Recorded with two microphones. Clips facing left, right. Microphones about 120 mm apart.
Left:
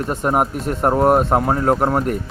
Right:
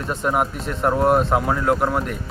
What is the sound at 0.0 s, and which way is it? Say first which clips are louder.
Speech: left 3 dB; 45° left (ahead or behind).